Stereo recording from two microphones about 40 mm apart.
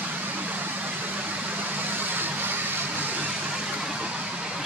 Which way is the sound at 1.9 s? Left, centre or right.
Right.